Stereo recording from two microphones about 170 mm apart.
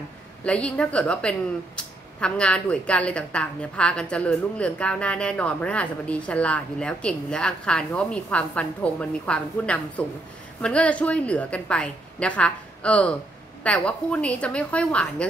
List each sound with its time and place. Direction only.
0.4 s a woman's voice: 5° left (ahead or behind)